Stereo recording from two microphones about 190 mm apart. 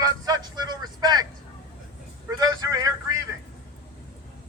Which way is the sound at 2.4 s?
20° right (ahead or behind).